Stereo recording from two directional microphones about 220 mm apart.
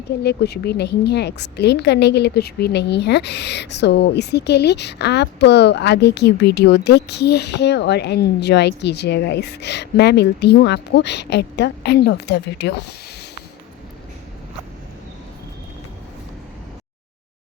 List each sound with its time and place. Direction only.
0.2 s a woman's voice: 50° left (ahead or behind)